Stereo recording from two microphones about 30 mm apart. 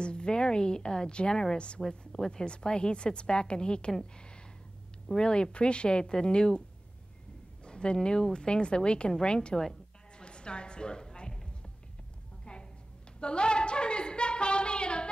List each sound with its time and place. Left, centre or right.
0.0 s a woman's voice: left
1.8 s a woman's voice: centre
2.3 s speech: left
5.0 s speech: left
7.6 s speech: left
10.1 s a sound: left
13.2 s a sound: left